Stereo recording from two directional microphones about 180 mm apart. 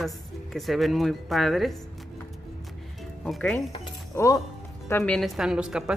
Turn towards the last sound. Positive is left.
turn(degrees=-5)  # may be behind; listen again after turning